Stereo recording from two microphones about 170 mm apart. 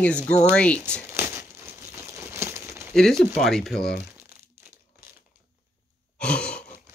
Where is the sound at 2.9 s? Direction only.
5° left (ahead or behind).